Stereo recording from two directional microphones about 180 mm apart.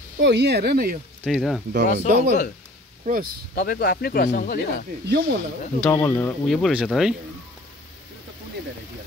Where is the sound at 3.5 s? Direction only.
55° left (ahead or behind).